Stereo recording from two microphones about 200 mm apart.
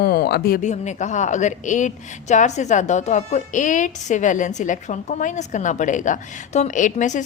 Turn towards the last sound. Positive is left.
turn(degrees=40)  # may be behind; listen again after turning